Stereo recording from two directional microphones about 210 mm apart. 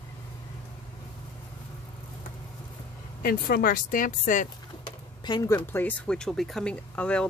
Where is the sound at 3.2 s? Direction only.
45° left (ahead or behind).